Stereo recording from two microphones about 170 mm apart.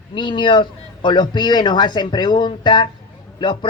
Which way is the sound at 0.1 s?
30° left (ahead or behind).